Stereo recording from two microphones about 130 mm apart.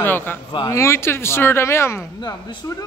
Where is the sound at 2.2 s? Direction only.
30° left (ahead or behind).